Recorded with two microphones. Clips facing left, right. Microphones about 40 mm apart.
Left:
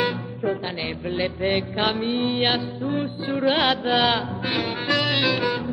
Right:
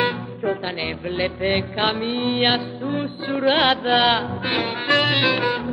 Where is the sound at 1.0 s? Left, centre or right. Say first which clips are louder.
Right 1 dB; centre.